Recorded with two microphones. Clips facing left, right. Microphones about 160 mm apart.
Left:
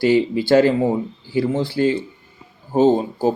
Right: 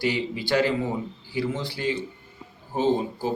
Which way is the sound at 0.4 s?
40° left (ahead or behind).